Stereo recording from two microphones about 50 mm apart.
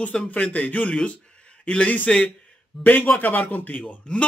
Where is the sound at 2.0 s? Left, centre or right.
Centre.